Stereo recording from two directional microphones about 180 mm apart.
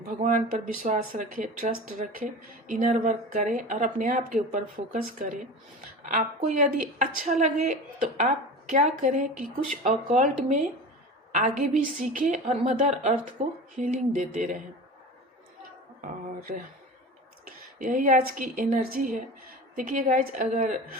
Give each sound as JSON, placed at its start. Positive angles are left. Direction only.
{"t": 0.1, "sound": "speech", "side_deg": -45}
{"t": 17.7, "sound": "speech", "side_deg": -45}